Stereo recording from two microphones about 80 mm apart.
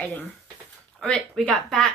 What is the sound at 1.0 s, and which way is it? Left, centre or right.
Speech, centre.